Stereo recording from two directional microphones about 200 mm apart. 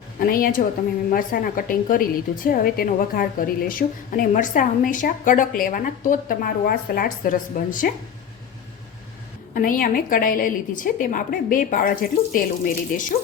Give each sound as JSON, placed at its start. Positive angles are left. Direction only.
{"t": 0.2, "sound": "a woman's voice", "side_deg": 45}
{"t": 9.6, "sound": "a woman's voice", "side_deg": 45}